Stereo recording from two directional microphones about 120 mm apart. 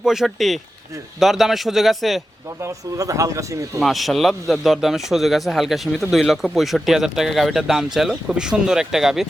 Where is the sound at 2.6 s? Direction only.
25° right (ahead or behind).